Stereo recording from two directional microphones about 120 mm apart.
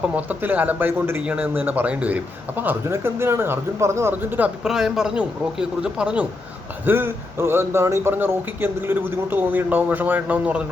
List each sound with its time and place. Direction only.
0.2 s speech: 15° right (ahead or behind)
6.8 s speech: 20° right (ahead or behind)